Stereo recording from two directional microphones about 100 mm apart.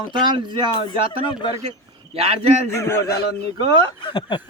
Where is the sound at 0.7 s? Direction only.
50° left (ahead or behind).